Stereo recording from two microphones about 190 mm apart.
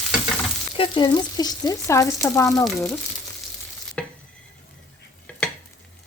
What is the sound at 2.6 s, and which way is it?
Speech, centre (ahead or behind).